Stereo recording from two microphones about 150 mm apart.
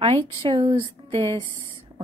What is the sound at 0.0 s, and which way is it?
A woman's voice, 35° right (ahead or behind).